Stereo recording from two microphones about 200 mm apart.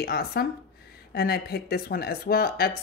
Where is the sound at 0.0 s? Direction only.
50° left (ahead or behind).